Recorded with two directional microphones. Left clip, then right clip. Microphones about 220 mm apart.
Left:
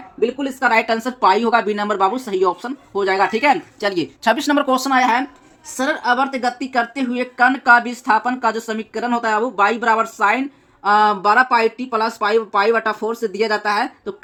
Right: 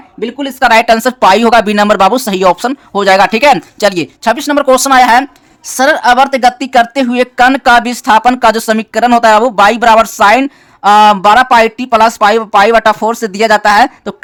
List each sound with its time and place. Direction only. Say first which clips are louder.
0.2 s speech: right 7 dB; 45° right (ahead or behind)